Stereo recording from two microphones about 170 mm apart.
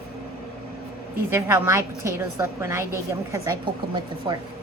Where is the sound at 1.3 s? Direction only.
15° right (ahead or behind).